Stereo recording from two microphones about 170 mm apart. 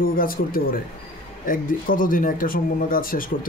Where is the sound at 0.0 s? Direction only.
55° left (ahead or behind).